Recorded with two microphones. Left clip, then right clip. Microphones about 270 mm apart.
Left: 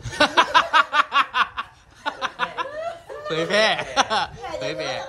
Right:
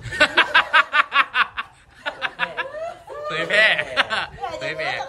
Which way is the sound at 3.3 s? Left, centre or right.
Centre.